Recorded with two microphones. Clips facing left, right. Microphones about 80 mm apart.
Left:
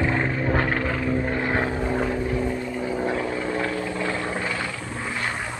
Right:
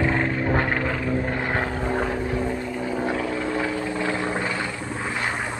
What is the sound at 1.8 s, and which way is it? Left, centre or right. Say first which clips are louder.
Vehicle: even; centre.